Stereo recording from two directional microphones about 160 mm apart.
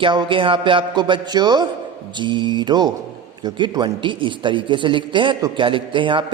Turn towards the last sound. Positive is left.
turn(degrees=-30)  # may be behind; listen again after turning